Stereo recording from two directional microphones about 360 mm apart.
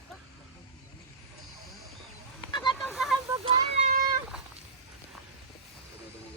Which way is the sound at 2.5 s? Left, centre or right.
Centre.